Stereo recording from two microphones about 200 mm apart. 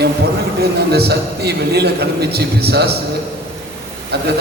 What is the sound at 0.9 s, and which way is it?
A man's voice, 55° right (ahead or behind).